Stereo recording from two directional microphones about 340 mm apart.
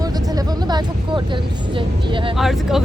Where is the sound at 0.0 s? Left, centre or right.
Centre.